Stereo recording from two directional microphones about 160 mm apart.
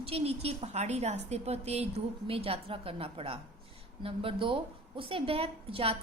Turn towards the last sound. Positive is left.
turn(degrees=-35)  # may be behind; listen again after turning